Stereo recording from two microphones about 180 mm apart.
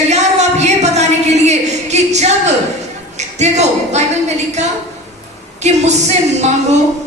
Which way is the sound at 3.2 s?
40° right (ahead or behind).